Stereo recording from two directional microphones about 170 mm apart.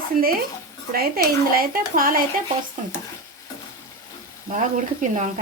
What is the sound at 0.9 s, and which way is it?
Speech, 60° right (ahead or behind).